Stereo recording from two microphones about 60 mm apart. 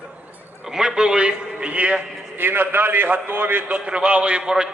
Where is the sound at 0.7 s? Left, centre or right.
Centre.